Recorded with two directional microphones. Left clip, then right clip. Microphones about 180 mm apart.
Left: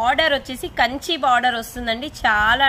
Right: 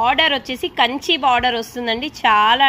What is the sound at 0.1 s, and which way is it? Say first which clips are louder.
Speech: right 2 dB; 40° left (ahead or behind).